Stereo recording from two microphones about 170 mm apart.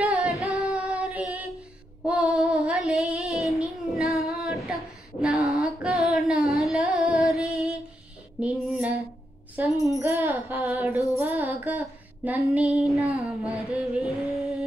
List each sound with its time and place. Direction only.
0.0 s singing: 5° right (ahead or behind)
0.7 s child singing: centre (ahead or behind)
3.8 s female singing: centre (ahead or behind)
5.8 s music: centre (ahead or behind)
8.4 s female singing: 5° right (ahead or behind)
9.6 s a sound: 10° right (ahead or behind)
9.9 s music: 15° right (ahead or behind)
10.5 s a sound: 15° right (ahead or behind)
11.1 s music: 15° right (ahead or behind)
11.6 s a sound: 10° right (ahead or behind)
12.4 s child singing: 5° right (ahead or behind)
13.2 s a sound: centre (ahead or behind)